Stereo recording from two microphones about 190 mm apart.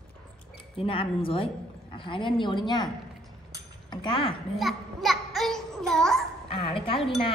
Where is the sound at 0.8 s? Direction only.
30° left (ahead or behind).